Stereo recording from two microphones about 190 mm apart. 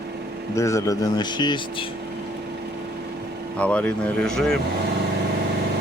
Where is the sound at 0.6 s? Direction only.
15° left (ahead or behind).